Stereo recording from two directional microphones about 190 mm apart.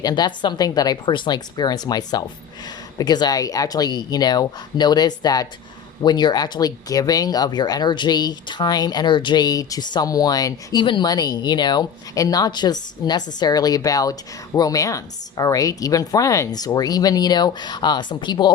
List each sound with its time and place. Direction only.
0.0 s speech: 20° left (ahead or behind)